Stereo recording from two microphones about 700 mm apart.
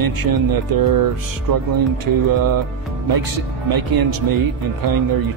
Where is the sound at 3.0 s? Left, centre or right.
Right.